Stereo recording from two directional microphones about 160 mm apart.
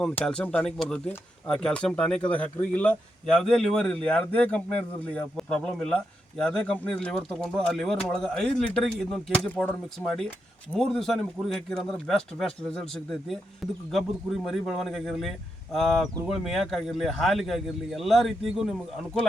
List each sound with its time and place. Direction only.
0.0 s speech: 5° left (ahead or behind)